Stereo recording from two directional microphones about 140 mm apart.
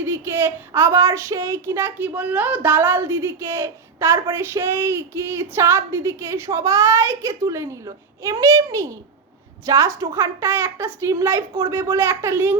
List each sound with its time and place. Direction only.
0.0 s a woman's voice: 15° right (ahead or behind)